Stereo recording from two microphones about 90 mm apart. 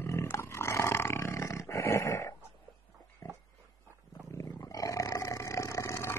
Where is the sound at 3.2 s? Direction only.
35° left (ahead or behind).